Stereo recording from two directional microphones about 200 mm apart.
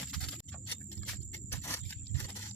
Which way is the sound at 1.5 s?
10° left (ahead or behind).